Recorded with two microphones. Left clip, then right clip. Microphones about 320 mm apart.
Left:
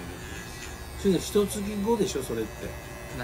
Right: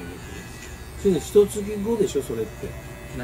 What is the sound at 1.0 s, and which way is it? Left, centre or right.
Speech, centre.